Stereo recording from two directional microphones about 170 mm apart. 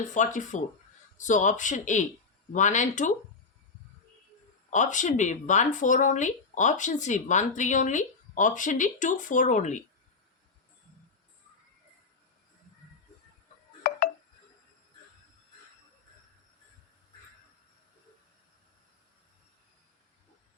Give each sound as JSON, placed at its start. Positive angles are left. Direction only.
{"t": 0.1, "sound": "speech", "side_deg": 45}
{"t": 4.7, "sound": "speech", "side_deg": 45}
{"t": 13.8, "sound": "a sound", "side_deg": 60}